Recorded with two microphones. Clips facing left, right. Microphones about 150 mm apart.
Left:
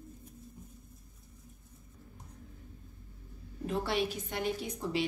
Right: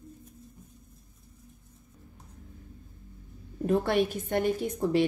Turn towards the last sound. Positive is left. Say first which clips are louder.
# right 8 dB
turn(degrees=-50)  # may be behind; listen again after turning